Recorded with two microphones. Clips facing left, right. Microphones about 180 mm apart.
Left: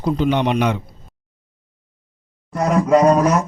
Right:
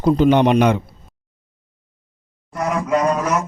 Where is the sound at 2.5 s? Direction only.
35° left (ahead or behind).